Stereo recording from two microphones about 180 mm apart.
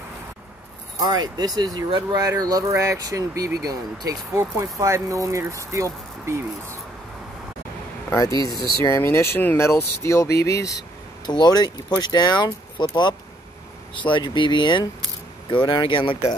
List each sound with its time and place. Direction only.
0.9 s speech: 20° right (ahead or behind)
8.1 s speech: 20° left (ahead or behind)